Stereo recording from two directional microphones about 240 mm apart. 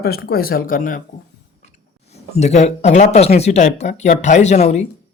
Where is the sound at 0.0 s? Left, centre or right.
Left.